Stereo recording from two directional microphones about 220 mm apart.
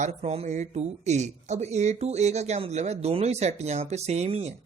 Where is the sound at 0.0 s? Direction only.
30° right (ahead or behind).